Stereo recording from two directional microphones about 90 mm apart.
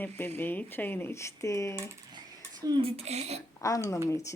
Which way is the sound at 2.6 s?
45° right (ahead or behind).